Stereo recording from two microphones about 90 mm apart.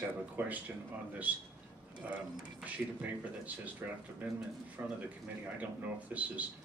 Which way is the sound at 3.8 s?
20° right (ahead or behind).